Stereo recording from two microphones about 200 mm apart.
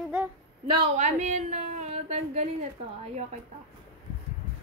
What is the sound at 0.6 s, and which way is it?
A woman's voice, 25° right (ahead or behind).